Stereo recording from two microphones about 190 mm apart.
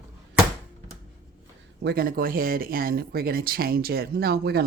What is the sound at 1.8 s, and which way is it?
Speech, 50° right (ahead or behind).